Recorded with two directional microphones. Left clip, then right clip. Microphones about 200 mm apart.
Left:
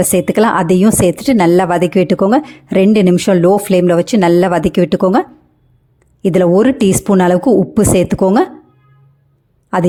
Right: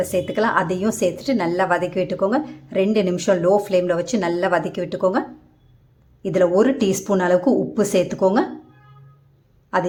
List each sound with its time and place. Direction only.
0.0 s a woman's voice: 45° left (ahead or behind)
6.2 s a woman's voice: 40° left (ahead or behind)